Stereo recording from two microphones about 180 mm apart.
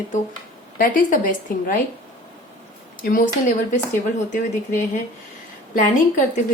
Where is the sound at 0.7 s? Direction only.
50° left (ahead or behind).